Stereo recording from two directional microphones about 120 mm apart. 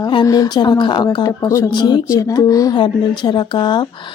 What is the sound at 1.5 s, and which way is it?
Speech, 25° left (ahead or behind).